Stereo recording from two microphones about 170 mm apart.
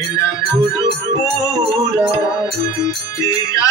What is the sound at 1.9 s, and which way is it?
Music, 20° left (ahead or behind).